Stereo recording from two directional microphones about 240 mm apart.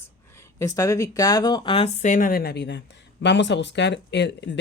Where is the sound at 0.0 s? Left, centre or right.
Centre.